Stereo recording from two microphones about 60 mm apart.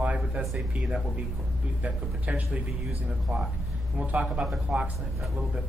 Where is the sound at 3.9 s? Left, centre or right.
Centre.